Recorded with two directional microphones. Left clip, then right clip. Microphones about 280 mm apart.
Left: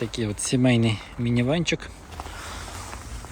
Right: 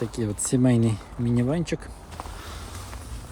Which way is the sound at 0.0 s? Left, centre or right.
Centre.